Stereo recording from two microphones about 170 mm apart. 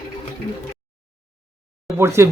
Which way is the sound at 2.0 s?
15° right (ahead or behind).